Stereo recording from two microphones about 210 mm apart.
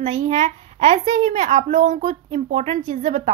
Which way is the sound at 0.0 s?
35° right (ahead or behind).